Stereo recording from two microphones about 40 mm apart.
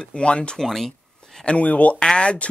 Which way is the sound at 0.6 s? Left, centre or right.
Centre.